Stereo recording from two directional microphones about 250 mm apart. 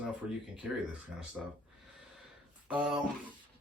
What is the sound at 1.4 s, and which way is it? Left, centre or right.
Speech, centre.